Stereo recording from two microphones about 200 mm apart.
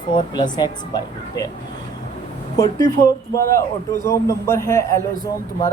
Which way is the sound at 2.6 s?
15° left (ahead or behind).